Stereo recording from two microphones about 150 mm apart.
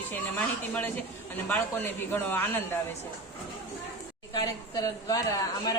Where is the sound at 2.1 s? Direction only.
15° left (ahead or behind).